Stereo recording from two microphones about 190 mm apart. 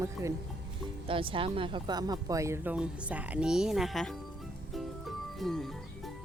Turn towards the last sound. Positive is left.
turn(degrees=0)  # may be behind; listen again after turning